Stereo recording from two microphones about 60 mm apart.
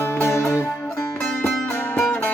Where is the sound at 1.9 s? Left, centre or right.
Left.